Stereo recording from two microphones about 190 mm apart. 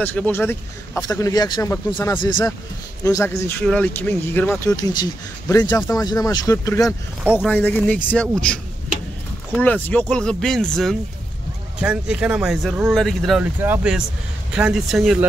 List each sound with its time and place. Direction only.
0.0 s speech: 10° left (ahead or behind)
9.6 s speech: 10° left (ahead or behind)